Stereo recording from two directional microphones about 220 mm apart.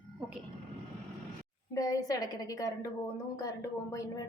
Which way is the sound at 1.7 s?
15° left (ahead or behind).